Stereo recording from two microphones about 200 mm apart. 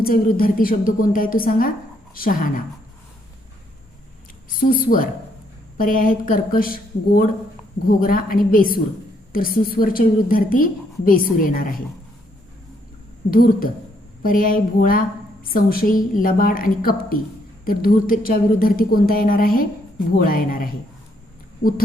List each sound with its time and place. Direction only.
0.0 s a woman's voice: 45° left (ahead or behind)
4.6 s a woman's voice: 45° left (ahead or behind)
13.3 s a woman's voice: 45° left (ahead or behind)